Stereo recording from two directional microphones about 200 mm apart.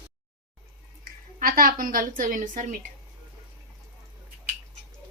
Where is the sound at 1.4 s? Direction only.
45° right (ahead or behind).